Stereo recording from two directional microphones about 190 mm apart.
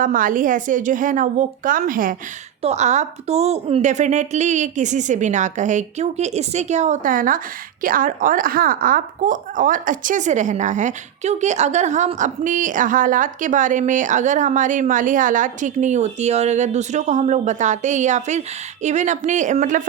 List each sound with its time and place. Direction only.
0.0 s a woman's voice: 45° right (ahead or behind)